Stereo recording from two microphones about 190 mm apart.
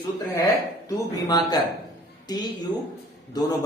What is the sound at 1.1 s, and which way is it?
Speech, 20° left (ahead or behind).